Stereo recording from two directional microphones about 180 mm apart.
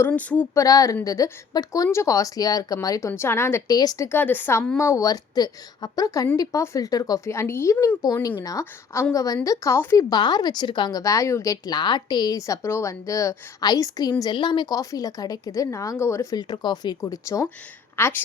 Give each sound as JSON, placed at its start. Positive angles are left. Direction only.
{"t": 0.0, "sound": "speech", "side_deg": 10}
{"t": 0.6, "sound": "a woman's voice", "side_deg": 20}